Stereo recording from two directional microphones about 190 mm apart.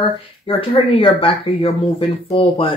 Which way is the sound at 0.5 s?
30° left (ahead or behind).